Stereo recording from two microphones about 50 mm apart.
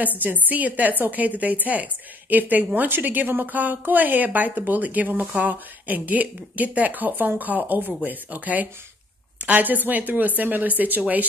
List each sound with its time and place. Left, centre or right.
0.2 s a woman's voice: right